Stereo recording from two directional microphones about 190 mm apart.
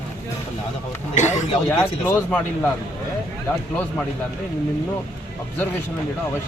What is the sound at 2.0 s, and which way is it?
Speech, 10° left (ahead or behind).